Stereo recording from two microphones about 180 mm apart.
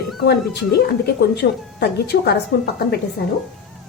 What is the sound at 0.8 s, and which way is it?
A woman's voice, 65° left (ahead or behind).